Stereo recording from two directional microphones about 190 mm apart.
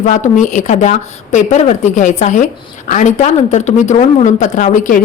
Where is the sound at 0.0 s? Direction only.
40° left (ahead or behind).